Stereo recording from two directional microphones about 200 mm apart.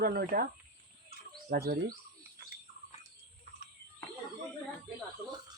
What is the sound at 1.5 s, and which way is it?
Speech, 45° right (ahead or behind).